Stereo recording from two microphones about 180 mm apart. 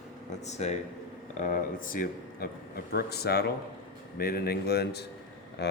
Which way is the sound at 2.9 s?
60° left (ahead or behind).